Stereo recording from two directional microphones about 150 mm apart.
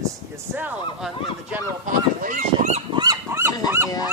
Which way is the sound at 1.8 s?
60° right (ahead or behind).